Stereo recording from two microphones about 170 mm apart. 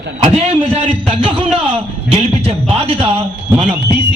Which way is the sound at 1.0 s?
30° right (ahead or behind).